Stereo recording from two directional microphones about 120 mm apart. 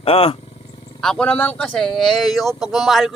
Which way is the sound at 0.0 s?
50° left (ahead or behind).